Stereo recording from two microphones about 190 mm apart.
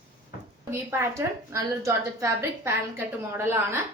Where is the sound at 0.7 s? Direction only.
15° right (ahead or behind).